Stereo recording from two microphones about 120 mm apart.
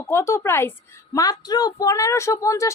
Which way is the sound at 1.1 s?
30° left (ahead or behind).